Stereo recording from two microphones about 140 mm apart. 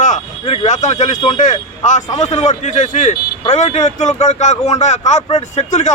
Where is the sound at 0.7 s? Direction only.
60° left (ahead or behind).